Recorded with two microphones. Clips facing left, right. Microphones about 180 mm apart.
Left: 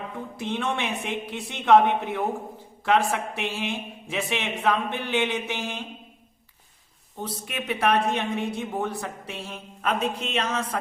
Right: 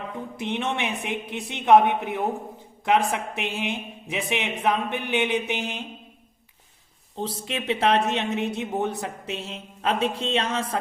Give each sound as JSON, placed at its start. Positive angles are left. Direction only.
{"t": 0.3, "sound": "speech", "side_deg": -20}
{"t": 7.2, "sound": "speech", "side_deg": -25}